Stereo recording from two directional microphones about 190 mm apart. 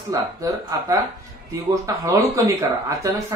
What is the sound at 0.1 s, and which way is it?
Speech, 20° right (ahead or behind).